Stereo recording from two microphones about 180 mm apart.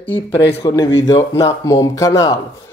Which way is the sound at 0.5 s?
30° left (ahead or behind).